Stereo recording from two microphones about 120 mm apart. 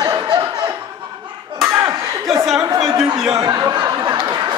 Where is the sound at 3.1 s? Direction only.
5° right (ahead or behind).